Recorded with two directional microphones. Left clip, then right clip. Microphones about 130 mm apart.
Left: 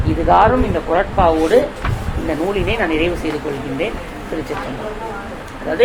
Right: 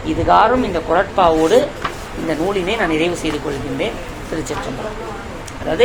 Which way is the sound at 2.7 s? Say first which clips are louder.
Even; 40° right (ahead or behind).